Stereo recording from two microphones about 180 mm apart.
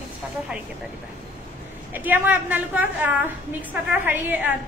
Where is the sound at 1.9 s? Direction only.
10° right (ahead or behind).